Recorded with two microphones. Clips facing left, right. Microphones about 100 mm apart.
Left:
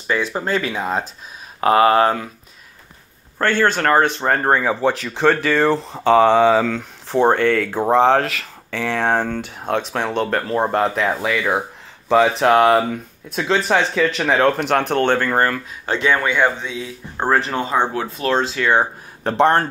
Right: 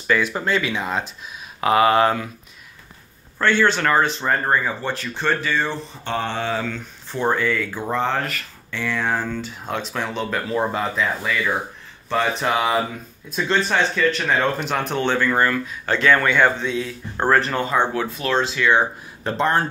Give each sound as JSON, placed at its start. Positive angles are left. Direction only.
{"t": 0.0, "sound": "speech", "side_deg": 25}
{"t": 3.3, "sound": "speech", "side_deg": 45}
{"t": 6.7, "sound": "speech", "side_deg": 80}
{"t": 7.9, "sound": "speech", "side_deg": 90}
{"t": 12.1, "sound": "speech", "side_deg": 85}
{"t": 15.8, "sound": "speech", "side_deg": 20}
{"t": 19.2, "sound": "speech", "side_deg": 65}